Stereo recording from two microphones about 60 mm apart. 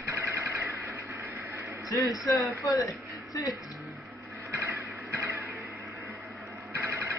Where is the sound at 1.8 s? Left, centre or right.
Left.